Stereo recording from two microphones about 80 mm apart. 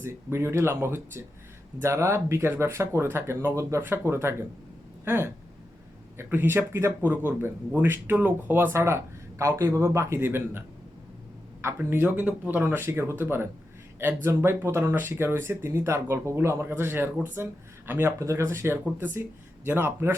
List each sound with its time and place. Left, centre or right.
0.0 s speech: right
3.8 s speech: right
11.8 s speech: right